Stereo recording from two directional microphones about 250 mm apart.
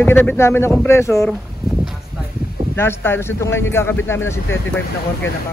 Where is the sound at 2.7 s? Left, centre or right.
Centre.